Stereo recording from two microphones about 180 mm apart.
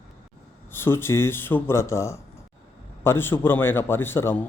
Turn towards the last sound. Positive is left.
turn(degrees=15)  # may be behind; listen again after turning